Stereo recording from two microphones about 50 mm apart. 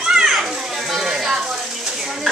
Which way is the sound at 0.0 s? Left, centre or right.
Centre.